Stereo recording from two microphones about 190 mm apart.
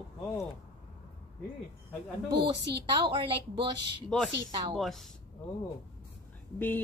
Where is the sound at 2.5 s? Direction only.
60° right (ahead or behind).